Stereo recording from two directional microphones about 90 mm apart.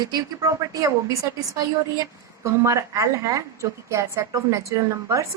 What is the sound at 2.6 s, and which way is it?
A woman's voice, 35° right (ahead or behind).